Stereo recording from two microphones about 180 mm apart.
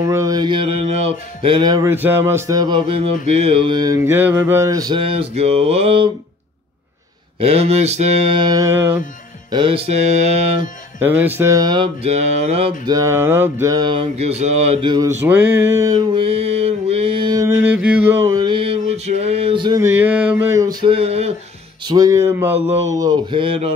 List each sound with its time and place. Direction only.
0.0 s music: 15° right (ahead or behind); by 6.0 s 35° right (ahead or behind)
7.3 s mantra: 35° right (ahead or behind); by 9.0 s 15° right (ahead or behind)
9.5 s mantra: 30° right (ahead or behind)
11.0 s music: 10° right (ahead or behind); by 12.7 s 35° right (ahead or behind)
12.8 s music: 20° right (ahead or behind)
15.0 s a sound: 10° right (ahead or behind)
17.6 s mantra: 5° right (ahead or behind)
18.2 s a sound: 25° right (ahead or behind)
19.8 s a sound: 10° right (ahead or behind)
20.9 s mantra: 35° right (ahead or behind)
21.8 s music: 20° right (ahead or behind)